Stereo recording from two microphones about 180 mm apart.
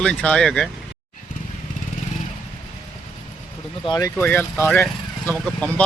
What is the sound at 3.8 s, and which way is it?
Speech, 25° left (ahead or behind).